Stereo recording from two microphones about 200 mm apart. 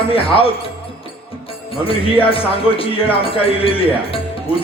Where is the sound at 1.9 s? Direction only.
25° left (ahead or behind).